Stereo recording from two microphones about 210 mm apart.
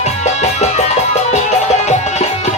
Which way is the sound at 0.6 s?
30° left (ahead or behind).